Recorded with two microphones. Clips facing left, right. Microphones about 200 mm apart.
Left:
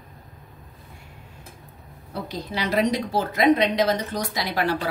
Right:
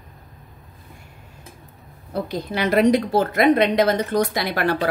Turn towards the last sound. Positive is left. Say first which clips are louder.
# right 3 dB
turn(degrees=-60)  # may be behind; listen again after turning